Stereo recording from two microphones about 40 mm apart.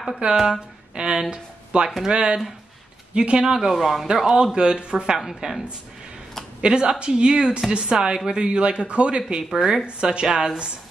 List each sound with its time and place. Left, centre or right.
0.2 s a man's voice: right
3.5 s a man's voice: centre
4.4 s speech: right
6.6 s a man's voice: right
9.4 s speech: centre
9.8 s a man's voice: right